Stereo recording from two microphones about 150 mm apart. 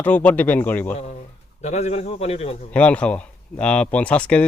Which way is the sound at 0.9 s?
50° left (ahead or behind).